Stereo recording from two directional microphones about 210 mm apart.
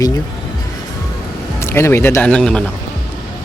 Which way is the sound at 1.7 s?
10° left (ahead or behind).